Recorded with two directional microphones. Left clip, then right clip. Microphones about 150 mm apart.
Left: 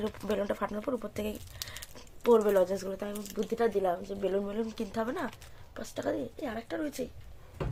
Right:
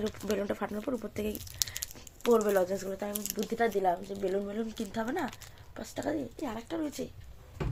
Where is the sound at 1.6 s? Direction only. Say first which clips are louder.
Right 9 dB; 45° right (ahead or behind).